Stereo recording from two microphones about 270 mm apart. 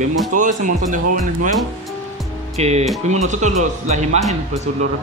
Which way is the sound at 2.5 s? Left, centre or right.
Right.